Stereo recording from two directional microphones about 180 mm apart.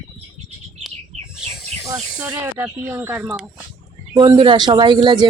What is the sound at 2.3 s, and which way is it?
Speech, 15° right (ahead or behind).